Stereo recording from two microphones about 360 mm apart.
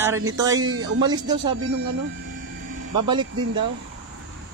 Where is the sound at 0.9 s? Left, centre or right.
Centre.